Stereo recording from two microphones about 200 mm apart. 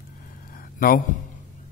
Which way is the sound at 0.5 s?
45° left (ahead or behind).